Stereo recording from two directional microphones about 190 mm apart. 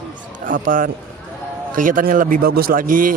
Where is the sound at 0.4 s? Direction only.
45° right (ahead or behind).